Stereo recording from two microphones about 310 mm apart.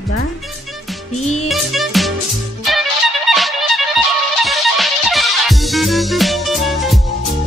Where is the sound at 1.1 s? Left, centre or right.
Left.